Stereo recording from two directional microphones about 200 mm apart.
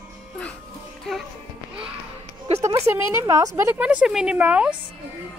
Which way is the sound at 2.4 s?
30° right (ahead or behind).